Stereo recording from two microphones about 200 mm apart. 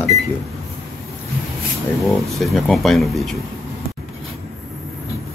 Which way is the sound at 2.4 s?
Centre (ahead or behind).